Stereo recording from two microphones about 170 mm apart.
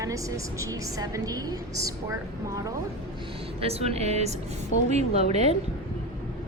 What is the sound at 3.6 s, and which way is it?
A woman's voice, 35° right (ahead or behind).